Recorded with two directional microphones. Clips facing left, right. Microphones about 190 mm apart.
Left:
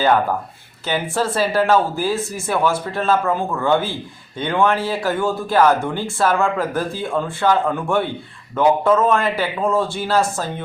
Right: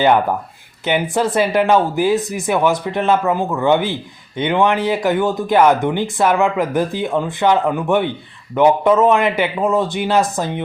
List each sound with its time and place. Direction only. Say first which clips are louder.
0.9 s speech: right 4 dB; 20° right (ahead or behind)